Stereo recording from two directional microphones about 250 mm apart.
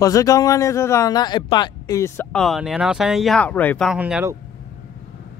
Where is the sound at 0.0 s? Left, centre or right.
Centre.